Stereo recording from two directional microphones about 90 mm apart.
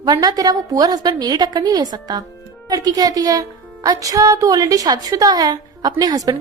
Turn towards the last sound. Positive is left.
turn(degrees=-45)  # may be behind; listen again after turning